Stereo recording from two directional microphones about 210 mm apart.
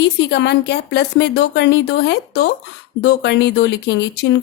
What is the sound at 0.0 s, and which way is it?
A woman's voice, 55° left (ahead or behind).